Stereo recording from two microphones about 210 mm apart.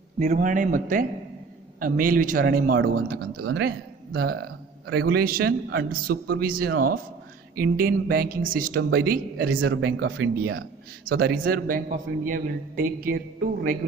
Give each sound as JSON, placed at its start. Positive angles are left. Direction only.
{"t": 0.2, "sound": "speech", "side_deg": -35}
{"t": 9.5, "sound": "speech", "side_deg": -65}